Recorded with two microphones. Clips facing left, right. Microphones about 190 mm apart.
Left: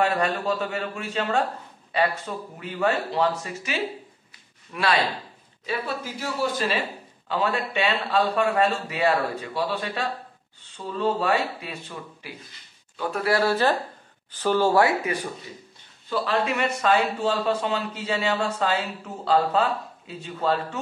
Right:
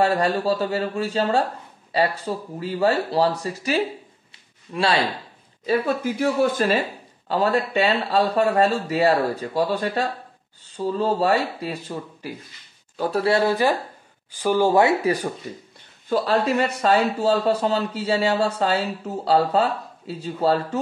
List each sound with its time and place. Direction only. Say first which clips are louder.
0.0 s speech: right 4 dB; 35° right (ahead or behind)
5.7 s speech: right 8 dB; 55° right (ahead or behind)
7.2 s speech: right 5 dB; 40° right (ahead or behind); by 15.0 s 20° right (ahead or behind)
15.5 s speech: right 7 dB; 50° right (ahead or behind)
16.1 s speech: right 4 dB; 40° right (ahead or behind)